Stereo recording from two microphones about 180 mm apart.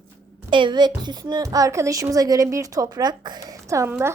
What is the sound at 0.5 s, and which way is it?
A woman's voice, 25° right (ahead or behind).